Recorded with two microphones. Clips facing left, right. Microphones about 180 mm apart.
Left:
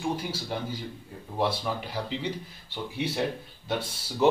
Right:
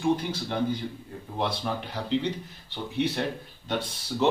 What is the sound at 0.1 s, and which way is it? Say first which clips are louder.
Speech: right 4 dB; 5° left (ahead or behind).